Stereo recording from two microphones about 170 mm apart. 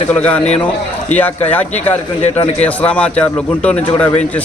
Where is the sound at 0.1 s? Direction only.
10° left (ahead or behind).